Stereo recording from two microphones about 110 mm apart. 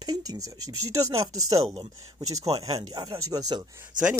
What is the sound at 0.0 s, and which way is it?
Speech, 35° right (ahead or behind).